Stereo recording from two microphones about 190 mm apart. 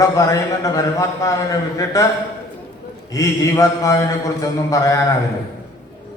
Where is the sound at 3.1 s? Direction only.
15° left (ahead or behind).